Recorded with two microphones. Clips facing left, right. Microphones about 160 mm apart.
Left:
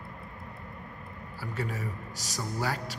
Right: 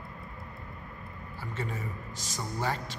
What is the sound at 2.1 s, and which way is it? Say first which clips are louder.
Speech: left 1 dB; 40° left (ahead or behind).